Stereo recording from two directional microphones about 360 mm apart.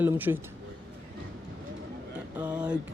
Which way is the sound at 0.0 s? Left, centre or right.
Centre.